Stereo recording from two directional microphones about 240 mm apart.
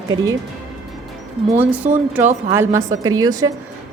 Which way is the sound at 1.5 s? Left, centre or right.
Centre.